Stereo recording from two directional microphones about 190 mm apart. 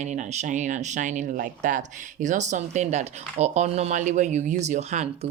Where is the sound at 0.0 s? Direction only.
40° right (ahead or behind).